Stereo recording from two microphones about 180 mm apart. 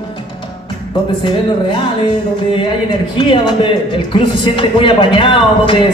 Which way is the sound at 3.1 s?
30° left (ahead or behind).